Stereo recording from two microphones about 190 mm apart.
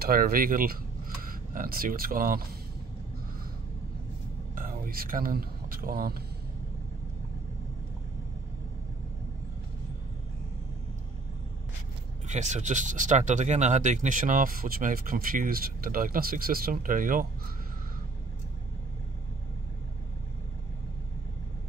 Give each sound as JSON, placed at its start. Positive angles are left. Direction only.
{"t": 0.0, "sound": "speech", "side_deg": -50}
{"t": 4.6, "sound": "a sound", "side_deg": -50}
{"t": 12.3, "sound": "speech", "side_deg": -40}